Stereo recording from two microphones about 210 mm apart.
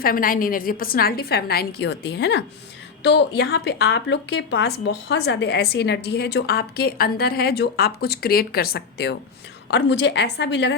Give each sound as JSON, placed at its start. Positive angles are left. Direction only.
{"t": 0.0, "sound": "a woman's voice", "side_deg": 40}